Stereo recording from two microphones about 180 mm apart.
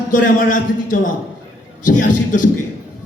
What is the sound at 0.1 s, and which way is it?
A man's voice, 50° left (ahead or behind).